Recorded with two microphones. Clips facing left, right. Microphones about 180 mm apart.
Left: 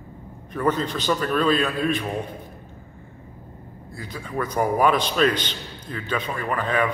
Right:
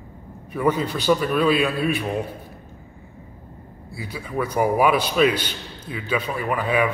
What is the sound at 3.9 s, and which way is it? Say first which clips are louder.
A man's voice: right 2 dB; 10° right (ahead or behind).